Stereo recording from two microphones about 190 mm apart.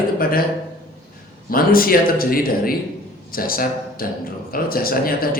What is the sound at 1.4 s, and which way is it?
A man's voice, 50° left (ahead or behind).